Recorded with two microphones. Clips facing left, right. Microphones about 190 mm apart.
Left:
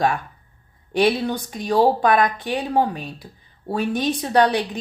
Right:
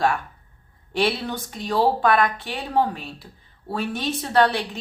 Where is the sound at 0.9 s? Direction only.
15° left (ahead or behind).